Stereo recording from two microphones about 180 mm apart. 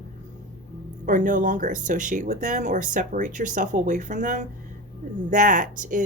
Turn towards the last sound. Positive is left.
turn(degrees=-45)  # may be behind; listen again after turning